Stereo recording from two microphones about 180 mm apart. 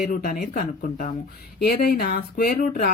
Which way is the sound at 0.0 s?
55° left (ahead or behind).